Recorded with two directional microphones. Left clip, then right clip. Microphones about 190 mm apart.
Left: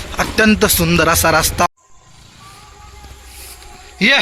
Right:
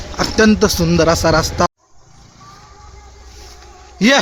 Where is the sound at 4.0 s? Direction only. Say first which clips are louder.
Left 1 dB; 20° right (ahead or behind).